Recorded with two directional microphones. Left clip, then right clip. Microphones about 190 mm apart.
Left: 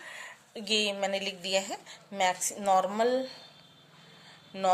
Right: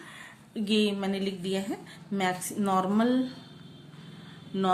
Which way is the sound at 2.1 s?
20° left (ahead or behind).